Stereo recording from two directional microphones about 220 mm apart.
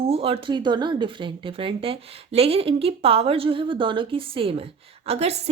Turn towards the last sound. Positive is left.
turn(degrees=-30)  # may be behind; listen again after turning